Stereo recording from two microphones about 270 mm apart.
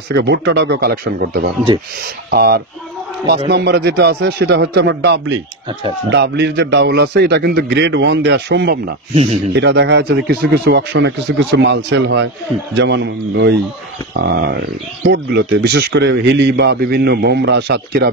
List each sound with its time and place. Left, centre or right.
0.1 s speech: right
9.1 s speech: right
9.5 s speech: right